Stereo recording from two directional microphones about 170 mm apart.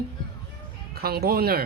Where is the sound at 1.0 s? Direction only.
65° right (ahead or behind).